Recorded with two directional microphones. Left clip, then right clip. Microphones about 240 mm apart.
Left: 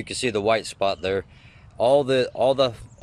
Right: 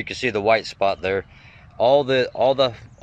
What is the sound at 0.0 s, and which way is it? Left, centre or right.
Speech, centre.